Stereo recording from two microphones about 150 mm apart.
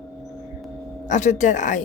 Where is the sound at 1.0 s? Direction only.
55° left (ahead or behind).